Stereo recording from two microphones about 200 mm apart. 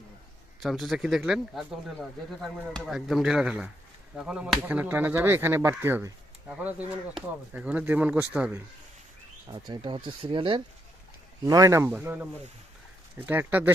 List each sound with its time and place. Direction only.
0.6 s speech: centre (ahead or behind)
9.5 s speech: 20° right (ahead or behind)